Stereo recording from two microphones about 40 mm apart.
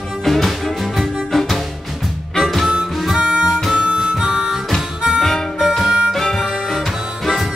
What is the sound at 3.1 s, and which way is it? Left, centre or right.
Harmonica, centre.